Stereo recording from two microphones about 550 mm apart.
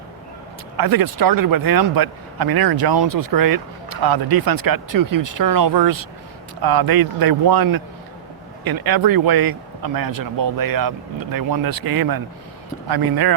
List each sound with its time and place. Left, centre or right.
0.8 s speech: right